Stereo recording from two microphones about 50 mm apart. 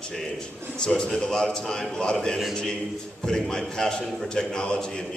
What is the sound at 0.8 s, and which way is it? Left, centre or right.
A man's voice, centre.